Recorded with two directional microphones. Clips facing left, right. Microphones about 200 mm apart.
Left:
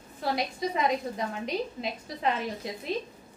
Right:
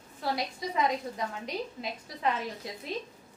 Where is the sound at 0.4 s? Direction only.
20° left (ahead or behind).